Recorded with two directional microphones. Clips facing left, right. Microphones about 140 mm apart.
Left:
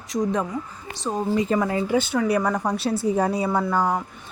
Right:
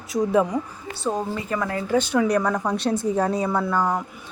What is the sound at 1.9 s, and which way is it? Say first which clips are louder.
Speech: right 4 dB; centre (ahead or behind).